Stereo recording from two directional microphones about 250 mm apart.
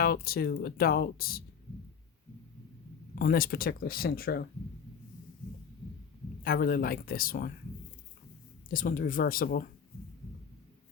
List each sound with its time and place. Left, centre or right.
0.0 s speech: left
3.2 s speech: left
6.4 s speech: left
8.7 s speech: left